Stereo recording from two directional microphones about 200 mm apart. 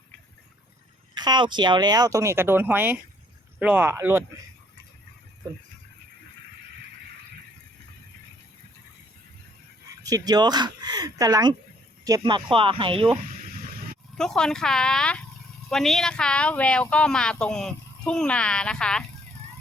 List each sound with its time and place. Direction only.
1.1 s speech: 20° right (ahead or behind)
10.0 s speech: 20° right (ahead or behind)
14.2 s speech: 5° left (ahead or behind)